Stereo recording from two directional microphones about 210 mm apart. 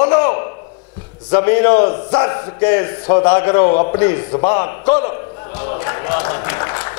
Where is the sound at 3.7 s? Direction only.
30° left (ahead or behind).